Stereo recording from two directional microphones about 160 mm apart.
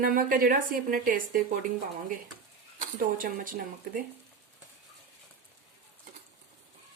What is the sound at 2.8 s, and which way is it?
A woman's voice, 60° right (ahead or behind).